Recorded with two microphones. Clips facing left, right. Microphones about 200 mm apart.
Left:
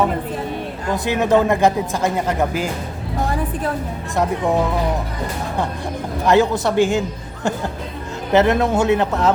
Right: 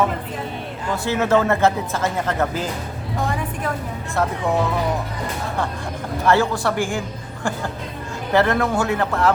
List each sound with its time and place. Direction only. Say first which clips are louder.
1.0 s speech: left 2 dB; 15° left (ahead or behind)
4.1 s speech: left 3 dB; 15° left (ahead or behind)
6.2 s speech: left 3 dB; 20° left (ahead or behind)
8.3 s speech: left 3 dB; 20° left (ahead or behind)